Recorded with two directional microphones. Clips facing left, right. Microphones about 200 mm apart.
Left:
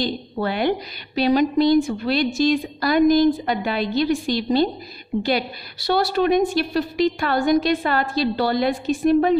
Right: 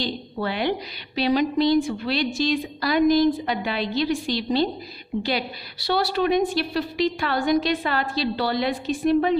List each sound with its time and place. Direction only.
0.0 s a woman's voice: 50° left (ahead or behind)